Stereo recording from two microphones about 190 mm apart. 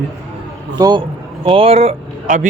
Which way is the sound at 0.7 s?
20° right (ahead or behind).